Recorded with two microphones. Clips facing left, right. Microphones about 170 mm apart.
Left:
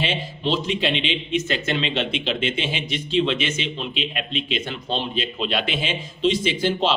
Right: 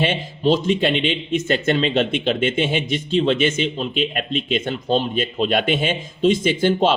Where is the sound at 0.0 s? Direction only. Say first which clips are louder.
Right 6 dB; 50° right (ahead or behind).